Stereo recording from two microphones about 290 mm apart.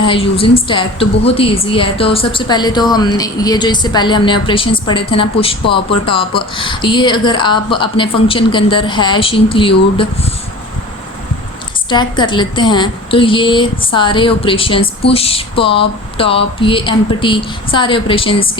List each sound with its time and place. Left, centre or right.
0.0 s a woman's voice: centre
11.9 s a woman's voice: centre